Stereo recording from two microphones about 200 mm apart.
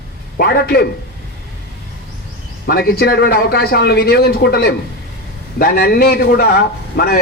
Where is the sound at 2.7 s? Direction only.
50° left (ahead or behind).